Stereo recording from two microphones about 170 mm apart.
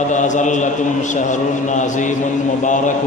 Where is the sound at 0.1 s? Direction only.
45° left (ahead or behind).